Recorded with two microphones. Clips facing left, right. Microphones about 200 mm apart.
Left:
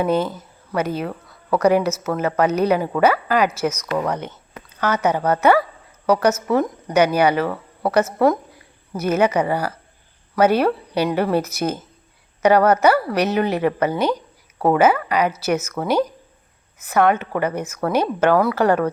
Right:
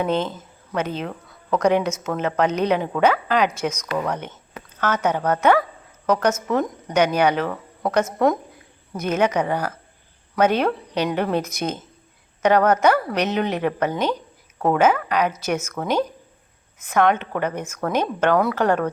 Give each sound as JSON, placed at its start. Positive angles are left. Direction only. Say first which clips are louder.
{"t": 0.0, "sound": "speech", "louder": "left 3 dB", "side_deg": 10}